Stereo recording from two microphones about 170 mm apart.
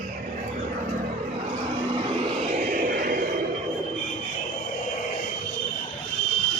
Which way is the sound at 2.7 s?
55° right (ahead or behind).